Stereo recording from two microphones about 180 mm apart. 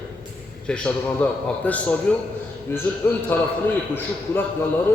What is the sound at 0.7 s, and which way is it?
A man's voice, 5° left (ahead or behind).